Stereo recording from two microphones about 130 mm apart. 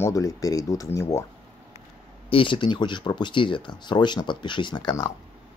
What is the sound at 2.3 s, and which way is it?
Speech, 40° left (ahead or behind).